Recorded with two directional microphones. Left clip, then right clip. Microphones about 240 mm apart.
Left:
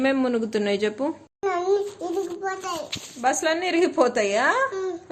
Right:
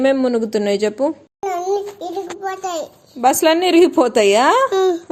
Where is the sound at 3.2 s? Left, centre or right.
Right.